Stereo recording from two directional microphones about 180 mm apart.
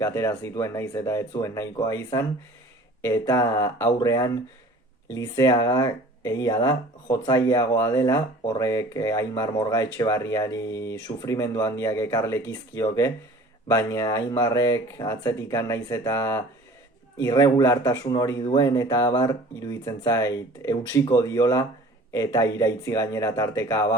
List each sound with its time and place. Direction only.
0.0 s speech: 15° left (ahead or behind)